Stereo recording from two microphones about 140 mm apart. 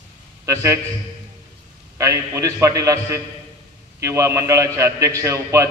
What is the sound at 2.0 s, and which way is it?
A man's voice, 20° right (ahead or behind).